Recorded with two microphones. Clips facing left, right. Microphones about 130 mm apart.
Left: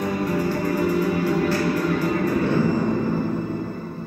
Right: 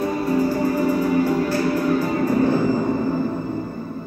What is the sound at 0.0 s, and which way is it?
Music, 35° right (ahead or behind).